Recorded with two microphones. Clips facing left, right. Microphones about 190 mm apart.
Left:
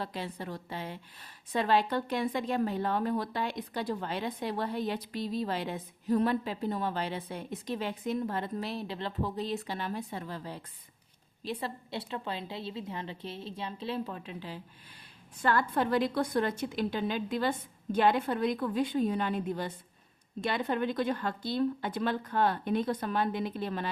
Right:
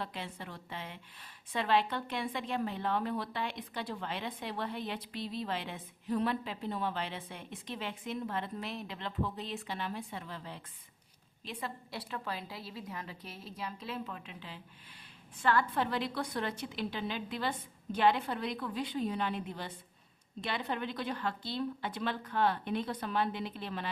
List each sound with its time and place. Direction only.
0.0 s speech: 40° left (ahead or behind)
11.4 s a woman's voice: 30° left (ahead or behind); by 23.9 s 45° left (ahead or behind)